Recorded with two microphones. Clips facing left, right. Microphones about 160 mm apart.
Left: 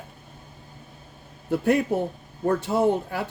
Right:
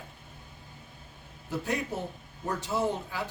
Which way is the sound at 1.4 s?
60° left (ahead or behind).